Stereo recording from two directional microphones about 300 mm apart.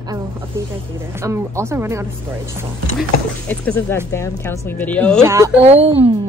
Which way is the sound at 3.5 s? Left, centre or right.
Centre.